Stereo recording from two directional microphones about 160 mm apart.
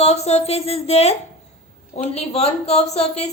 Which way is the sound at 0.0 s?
40° left (ahead or behind).